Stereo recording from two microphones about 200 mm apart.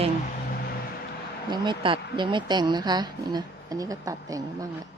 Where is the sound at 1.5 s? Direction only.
20° right (ahead or behind).